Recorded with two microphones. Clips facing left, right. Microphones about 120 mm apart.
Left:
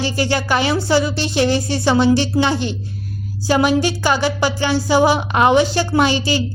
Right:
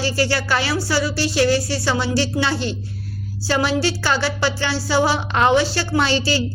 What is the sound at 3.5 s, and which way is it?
Speech, 15° left (ahead or behind).